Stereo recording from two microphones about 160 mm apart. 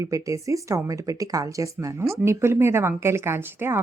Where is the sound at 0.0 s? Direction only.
20° right (ahead or behind).